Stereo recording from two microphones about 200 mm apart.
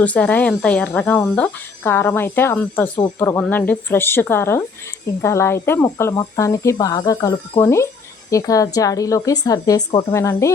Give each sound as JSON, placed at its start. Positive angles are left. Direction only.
{"t": 0.0, "sound": "speech", "side_deg": 5}